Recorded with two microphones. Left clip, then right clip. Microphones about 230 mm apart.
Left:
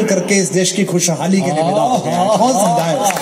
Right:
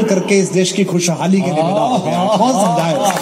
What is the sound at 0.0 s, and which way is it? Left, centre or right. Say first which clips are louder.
A man's voice: right 1 dB; left.